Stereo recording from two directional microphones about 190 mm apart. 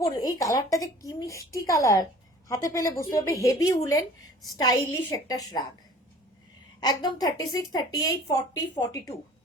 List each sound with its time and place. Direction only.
0.0 s a woman's voice: 20° left (ahead or behind)
6.7 s a woman's voice: 20° left (ahead or behind)